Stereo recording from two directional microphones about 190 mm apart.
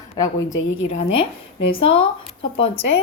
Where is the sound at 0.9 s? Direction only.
35° left (ahead or behind).